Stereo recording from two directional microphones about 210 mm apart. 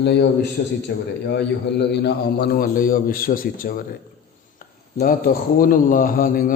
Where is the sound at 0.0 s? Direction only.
55° left (ahead or behind).